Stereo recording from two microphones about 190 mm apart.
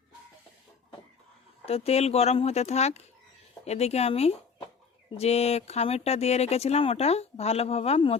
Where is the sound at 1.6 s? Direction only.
30° left (ahead or behind).